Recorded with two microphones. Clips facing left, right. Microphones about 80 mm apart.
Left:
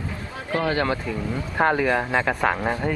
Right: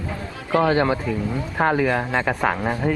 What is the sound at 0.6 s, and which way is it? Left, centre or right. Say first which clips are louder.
Speech: right 5 dB; right.